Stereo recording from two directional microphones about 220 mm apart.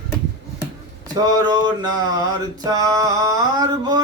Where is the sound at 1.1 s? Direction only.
20° right (ahead or behind).